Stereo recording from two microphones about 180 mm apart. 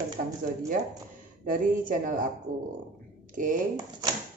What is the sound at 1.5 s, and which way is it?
Speech, 50° right (ahead or behind).